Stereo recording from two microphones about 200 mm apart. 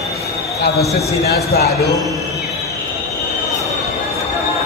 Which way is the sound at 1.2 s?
55° left (ahead or behind).